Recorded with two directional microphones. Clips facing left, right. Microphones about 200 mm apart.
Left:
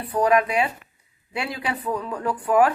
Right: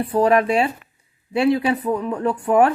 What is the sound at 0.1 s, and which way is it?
Speech, 30° right (ahead or behind).